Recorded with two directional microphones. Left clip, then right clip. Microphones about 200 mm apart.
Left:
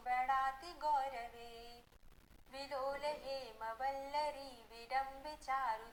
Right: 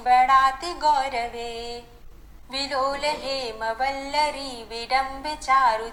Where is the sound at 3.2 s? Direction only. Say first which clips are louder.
Right 17 dB; 15° left (ahead or behind).